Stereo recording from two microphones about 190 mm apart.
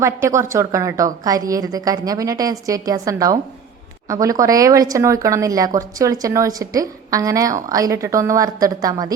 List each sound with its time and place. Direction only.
0.0 s speech: 15° right (ahead or behind)